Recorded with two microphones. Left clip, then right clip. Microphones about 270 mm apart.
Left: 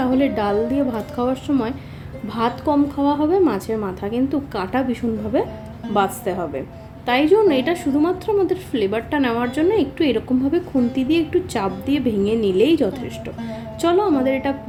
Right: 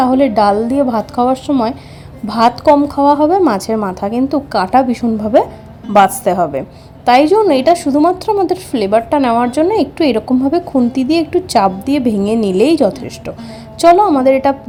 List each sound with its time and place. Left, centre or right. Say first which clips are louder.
0.0 s a woman's voice: right 9 dB; right